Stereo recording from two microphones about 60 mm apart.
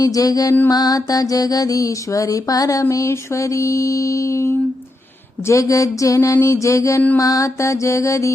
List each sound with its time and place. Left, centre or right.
0.0 s mantra: left
0.7 s music: left
3.1 s mantra: left
7.2 s mantra: left